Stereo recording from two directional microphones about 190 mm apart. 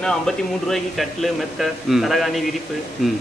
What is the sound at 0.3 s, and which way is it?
A man's voice, 5° left (ahead or behind).